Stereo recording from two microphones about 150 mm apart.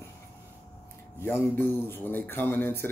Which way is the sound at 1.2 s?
15° left (ahead or behind).